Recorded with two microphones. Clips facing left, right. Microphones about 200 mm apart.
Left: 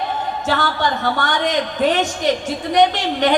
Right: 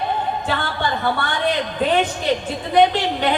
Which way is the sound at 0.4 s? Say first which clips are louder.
Left 3 dB; 80° left.